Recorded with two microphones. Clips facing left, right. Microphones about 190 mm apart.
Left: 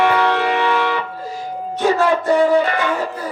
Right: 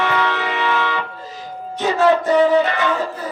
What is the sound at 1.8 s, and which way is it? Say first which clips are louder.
Speech: right 1 dB; 10° left (ahead or behind).